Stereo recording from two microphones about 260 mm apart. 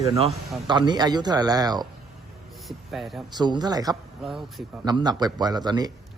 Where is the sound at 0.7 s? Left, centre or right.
Centre.